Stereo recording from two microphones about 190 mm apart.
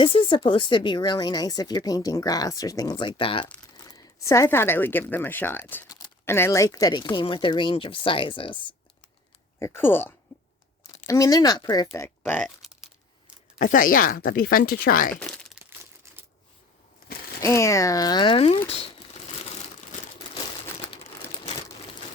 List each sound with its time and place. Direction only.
0.0 s speech: 25° left (ahead or behind)
9.6 s speech: 15° left (ahead or behind)
13.6 s speech: 45° left (ahead or behind)
15.1 s speech: 5° left (ahead or behind)
17.4 s speech: 15° left (ahead or behind)